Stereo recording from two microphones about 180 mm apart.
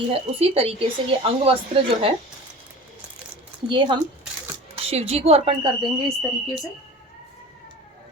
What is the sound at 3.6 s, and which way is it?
A woman's voice, 25° right (ahead or behind).